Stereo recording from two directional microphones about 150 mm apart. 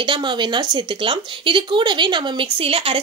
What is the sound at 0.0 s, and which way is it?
Speech, 30° right (ahead or behind).